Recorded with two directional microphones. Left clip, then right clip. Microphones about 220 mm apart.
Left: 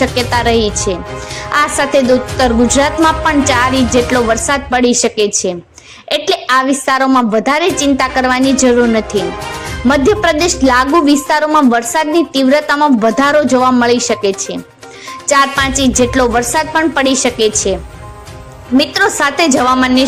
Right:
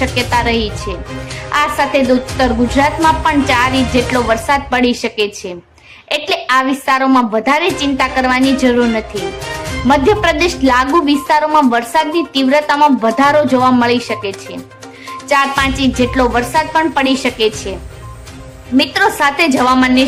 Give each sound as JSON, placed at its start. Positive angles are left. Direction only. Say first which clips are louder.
{"t": 0.0, "sound": "a woman's voice", "louder": "left 2 dB", "side_deg": 20}
{"t": 18.8, "sound": "a woman's voice", "louder": "even", "side_deg": 15}